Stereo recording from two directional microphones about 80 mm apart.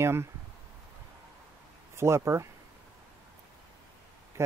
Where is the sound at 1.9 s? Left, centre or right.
Right.